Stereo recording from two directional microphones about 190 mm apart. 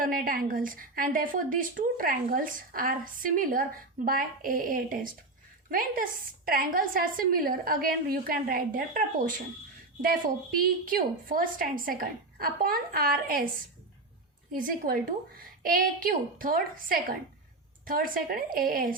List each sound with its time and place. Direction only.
0.0 s a woman's voice: 50° right (ahead or behind)
14.5 s a woman's voice: 50° right (ahead or behind)